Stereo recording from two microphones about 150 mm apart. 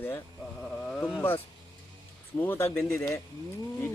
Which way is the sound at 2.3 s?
15° left (ahead or behind).